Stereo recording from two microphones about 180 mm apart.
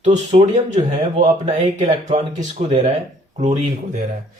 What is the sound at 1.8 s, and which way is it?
Speech, 35° right (ahead or behind).